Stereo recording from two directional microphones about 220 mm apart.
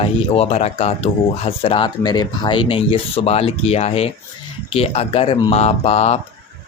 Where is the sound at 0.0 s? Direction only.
30° left (ahead or behind).